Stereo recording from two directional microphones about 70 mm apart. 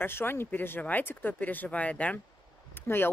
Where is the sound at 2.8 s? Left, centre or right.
Left.